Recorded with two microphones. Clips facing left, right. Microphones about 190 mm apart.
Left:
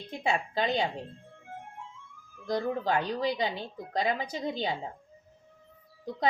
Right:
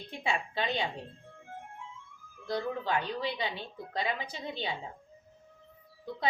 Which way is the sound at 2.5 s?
40° left (ahead or behind).